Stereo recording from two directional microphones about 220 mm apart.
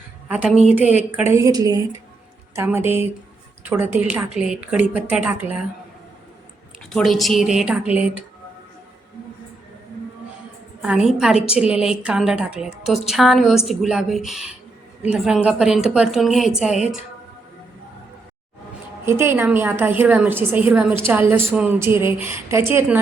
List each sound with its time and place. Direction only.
0.7 s a woman's voice: 5° right (ahead or behind)
6.9 s a woman's voice: centre (ahead or behind)
10.8 s a woman's voice: 5° right (ahead or behind)
19.0 s a woman's voice: 10° right (ahead or behind)